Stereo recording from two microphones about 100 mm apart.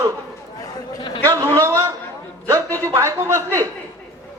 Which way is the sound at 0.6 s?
50° left (ahead or behind).